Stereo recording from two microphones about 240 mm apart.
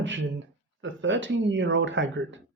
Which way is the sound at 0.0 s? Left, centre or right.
Right.